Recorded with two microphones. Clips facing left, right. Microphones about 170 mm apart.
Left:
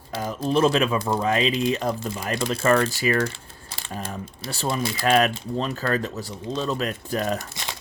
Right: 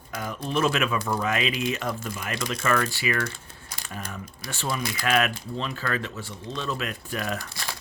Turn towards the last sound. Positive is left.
turn(degrees=20)  # may be behind; listen again after turning